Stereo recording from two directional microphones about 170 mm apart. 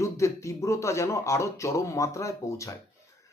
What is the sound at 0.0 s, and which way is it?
Speech, 15° left (ahead or behind).